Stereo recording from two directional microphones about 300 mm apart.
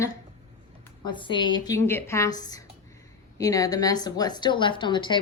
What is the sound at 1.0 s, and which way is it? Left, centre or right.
A woman's voice, centre.